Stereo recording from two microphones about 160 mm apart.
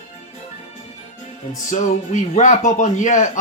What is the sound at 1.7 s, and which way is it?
Speech, 50° left (ahead or behind).